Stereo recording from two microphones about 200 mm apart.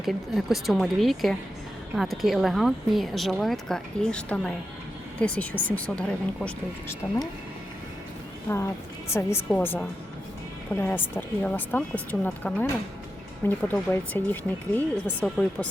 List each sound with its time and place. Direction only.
0.0 s speech: centre (ahead or behind)
8.4 s speech: 15° left (ahead or behind)